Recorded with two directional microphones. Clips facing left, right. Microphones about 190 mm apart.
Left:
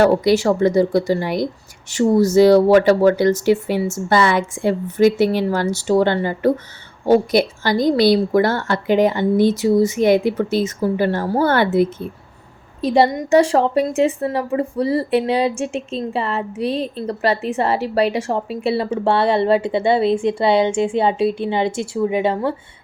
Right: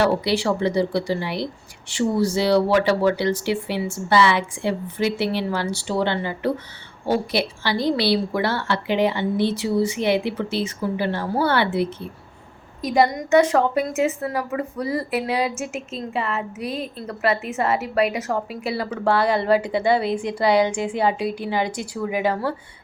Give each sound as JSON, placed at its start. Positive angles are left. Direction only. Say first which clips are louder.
{"t": 0.0, "sound": "a woman's voice", "louder": "left 6 dB", "side_deg": 45}
{"t": 12.8, "sound": "a woman's voice", "louder": "left 4 dB", "side_deg": 30}